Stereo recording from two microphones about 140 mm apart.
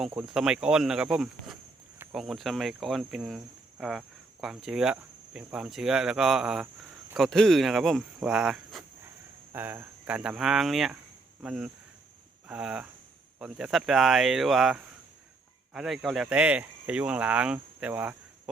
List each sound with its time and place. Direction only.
0.2 s cricket: 5° right (ahead or behind)
9.5 s speech: 15° right (ahead or behind)
13.4 s cricket: 5° right (ahead or behind)
15.7 s speech: 5° right (ahead or behind)